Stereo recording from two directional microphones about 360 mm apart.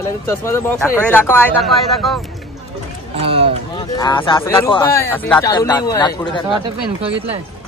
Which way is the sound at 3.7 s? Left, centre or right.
Centre.